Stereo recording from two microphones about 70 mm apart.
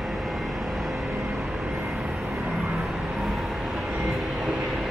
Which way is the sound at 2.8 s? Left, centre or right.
Centre.